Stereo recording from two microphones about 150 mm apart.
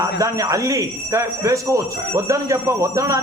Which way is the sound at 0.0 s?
20° right (ahead or behind).